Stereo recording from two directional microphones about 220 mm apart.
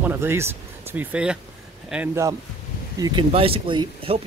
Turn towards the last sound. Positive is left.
turn(degrees=-25)  # may be behind; listen again after turning